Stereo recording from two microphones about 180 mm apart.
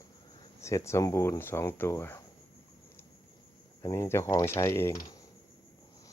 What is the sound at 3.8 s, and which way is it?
Speech, 15° left (ahead or behind).